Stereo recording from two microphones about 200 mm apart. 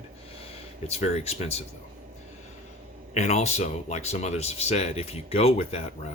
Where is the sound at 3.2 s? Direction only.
35° left (ahead or behind).